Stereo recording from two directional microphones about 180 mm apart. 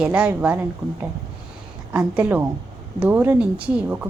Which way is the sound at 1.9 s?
10° right (ahead or behind).